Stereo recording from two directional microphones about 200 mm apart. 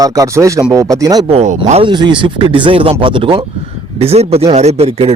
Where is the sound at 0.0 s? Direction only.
15° right (ahead or behind).